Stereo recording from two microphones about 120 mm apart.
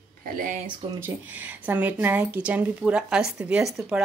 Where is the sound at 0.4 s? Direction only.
90° right.